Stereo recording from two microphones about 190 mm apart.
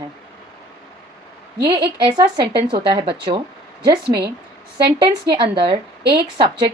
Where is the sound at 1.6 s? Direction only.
25° right (ahead or behind).